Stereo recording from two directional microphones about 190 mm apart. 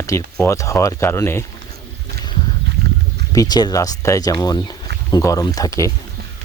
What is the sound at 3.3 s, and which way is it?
Speech, 20° left (ahead or behind).